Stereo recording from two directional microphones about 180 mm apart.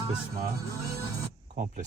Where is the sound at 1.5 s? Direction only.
45° right (ahead or behind).